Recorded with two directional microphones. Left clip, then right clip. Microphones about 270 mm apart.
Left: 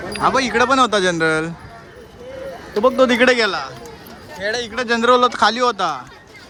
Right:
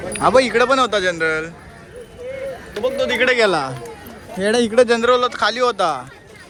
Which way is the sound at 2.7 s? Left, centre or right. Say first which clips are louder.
Left 5 dB; left.